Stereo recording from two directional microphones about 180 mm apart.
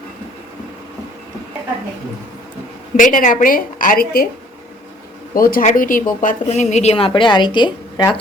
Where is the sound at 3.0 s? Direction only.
45° left (ahead or behind).